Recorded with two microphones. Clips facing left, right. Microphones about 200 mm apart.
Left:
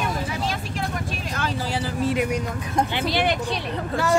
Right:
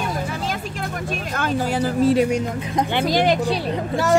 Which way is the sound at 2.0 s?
30° right (ahead or behind).